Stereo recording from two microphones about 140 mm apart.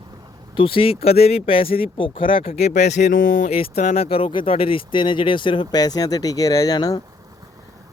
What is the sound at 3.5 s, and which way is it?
Speech, 50° left (ahead or behind).